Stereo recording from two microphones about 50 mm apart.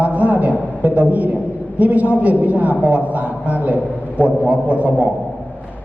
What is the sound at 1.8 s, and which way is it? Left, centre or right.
A man's voice, right.